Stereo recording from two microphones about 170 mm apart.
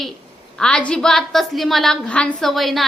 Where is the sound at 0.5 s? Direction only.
5° left (ahead or behind).